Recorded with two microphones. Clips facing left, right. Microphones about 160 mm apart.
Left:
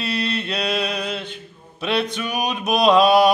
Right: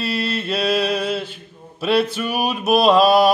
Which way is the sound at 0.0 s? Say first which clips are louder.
Right 1 dB; centre (ahead or behind).